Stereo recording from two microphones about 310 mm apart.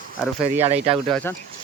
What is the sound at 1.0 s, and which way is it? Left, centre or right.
Speech, centre.